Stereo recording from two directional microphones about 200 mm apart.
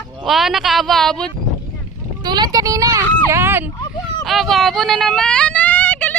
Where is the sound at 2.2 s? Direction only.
20° right (ahead or behind).